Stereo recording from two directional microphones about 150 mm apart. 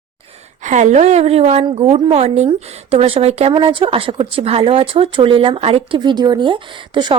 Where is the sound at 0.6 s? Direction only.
55° right (ahead or behind).